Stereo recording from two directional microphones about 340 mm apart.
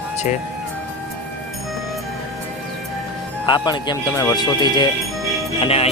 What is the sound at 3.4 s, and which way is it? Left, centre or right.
Speech, centre.